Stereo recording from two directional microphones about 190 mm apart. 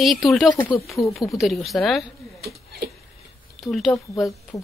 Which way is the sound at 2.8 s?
55° right (ahead or behind).